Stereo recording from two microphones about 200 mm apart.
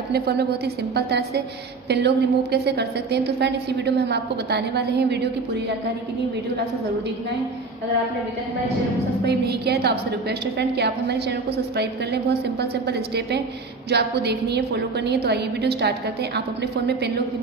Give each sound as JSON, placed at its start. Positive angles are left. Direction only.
{"t": 0.9, "sound": "a woman's voice", "side_deg": -55}
{"t": 9.2, "sound": "a woman's voice", "side_deg": -55}